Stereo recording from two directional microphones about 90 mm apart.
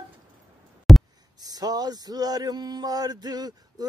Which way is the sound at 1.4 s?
45° right (ahead or behind).